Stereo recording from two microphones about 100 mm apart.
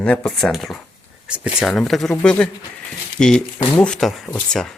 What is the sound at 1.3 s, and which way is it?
Speech, 10° right (ahead or behind).